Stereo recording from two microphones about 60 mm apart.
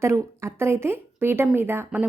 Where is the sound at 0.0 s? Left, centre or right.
Right.